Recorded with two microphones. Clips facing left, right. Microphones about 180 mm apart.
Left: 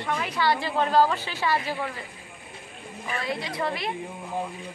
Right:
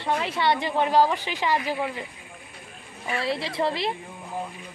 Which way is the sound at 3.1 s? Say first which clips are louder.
Right 3 dB; 30° right (ahead or behind).